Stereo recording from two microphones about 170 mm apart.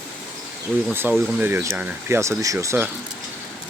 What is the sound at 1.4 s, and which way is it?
Speech, 10° right (ahead or behind).